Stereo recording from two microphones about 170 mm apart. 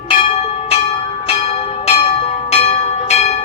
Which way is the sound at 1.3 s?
35° left (ahead or behind).